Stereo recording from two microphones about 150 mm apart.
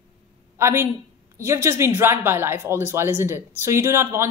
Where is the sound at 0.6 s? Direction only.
20° right (ahead or behind).